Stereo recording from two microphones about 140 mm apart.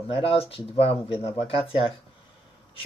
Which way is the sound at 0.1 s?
40° left (ahead or behind).